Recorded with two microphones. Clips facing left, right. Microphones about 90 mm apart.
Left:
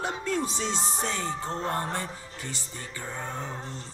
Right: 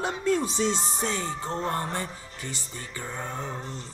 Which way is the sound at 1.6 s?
20° left (ahead or behind).